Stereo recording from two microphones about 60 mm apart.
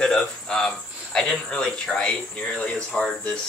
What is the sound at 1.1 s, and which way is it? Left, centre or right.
Speech, centre.